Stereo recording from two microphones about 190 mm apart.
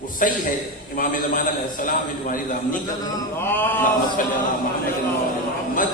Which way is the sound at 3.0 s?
15° left (ahead or behind).